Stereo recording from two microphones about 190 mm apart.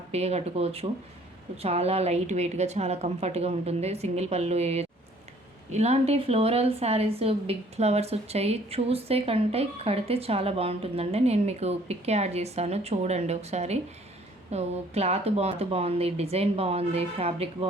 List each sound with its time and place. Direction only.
0.1 s a woman's voice: 35° right (ahead or behind)